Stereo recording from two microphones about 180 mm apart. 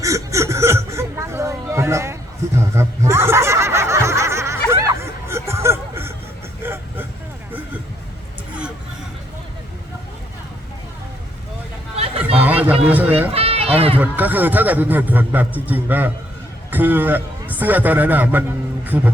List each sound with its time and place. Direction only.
0.0 s a sound: 15° right (ahead or behind)
2.6 s snicker: 15° right (ahead or behind)
4.7 s music: 15° right (ahead or behind)
6.6 s vehicle: 10° right (ahead or behind)
11.9 s a sound: 35° right (ahead or behind)
12.4 s a sound: 10° right (ahead or behind)
12.9 s a man's voice: 10° right (ahead or behind)
13.3 s run: 35° right (ahead or behind)
14.0 s a man's voice: 10° right (ahead or behind)